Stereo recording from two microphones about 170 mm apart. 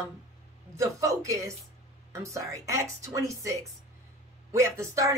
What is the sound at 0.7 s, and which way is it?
Speech, 20° right (ahead or behind).